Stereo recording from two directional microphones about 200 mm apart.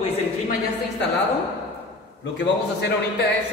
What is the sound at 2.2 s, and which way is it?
Speech, 60° left (ahead or behind).